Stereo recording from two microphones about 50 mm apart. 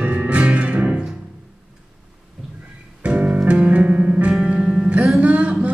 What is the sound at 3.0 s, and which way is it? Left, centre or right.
Music, right.